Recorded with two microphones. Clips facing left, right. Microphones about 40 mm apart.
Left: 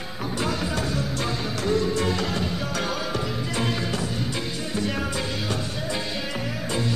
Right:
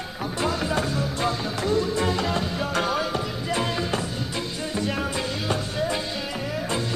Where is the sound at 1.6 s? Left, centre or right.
Centre.